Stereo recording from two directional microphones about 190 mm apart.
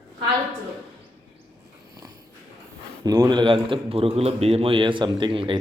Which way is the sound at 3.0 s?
20° right (ahead or behind).